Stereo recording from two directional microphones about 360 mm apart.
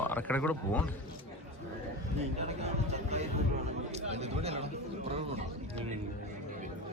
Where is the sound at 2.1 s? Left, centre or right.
Centre.